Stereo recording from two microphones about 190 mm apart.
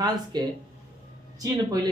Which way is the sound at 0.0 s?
20° right (ahead or behind).